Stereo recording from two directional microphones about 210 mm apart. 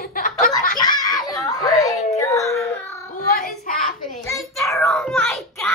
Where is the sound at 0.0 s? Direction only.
45° left (ahead or behind).